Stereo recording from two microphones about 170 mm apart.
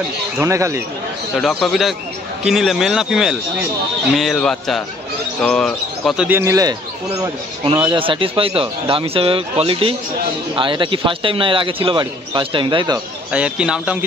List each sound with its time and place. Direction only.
0.4 s speech: 15° right (ahead or behind)
1.3 s speech: centre (ahead or behind)
6.4 s a man's voice: 20° right (ahead or behind)
13.3 s speech: 5° right (ahead or behind)